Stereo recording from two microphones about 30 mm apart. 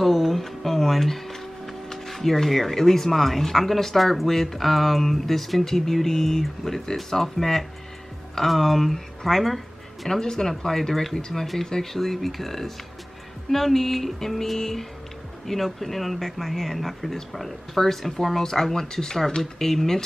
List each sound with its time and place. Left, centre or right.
0.0 s speech: centre
10.0 s speech: centre